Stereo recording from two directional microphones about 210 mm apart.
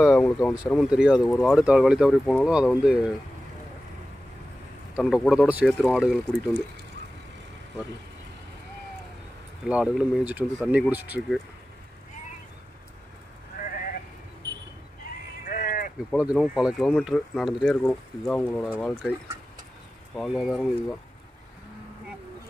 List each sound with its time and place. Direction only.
0.0 s speech: centre (ahead or behind)
4.9 s speech: centre (ahead or behind)
9.7 s speech: 5° right (ahead or behind)
15.4 s a sound: 40° left (ahead or behind)
16.1 s speech: centre (ahead or behind)
20.2 s speech: centre (ahead or behind)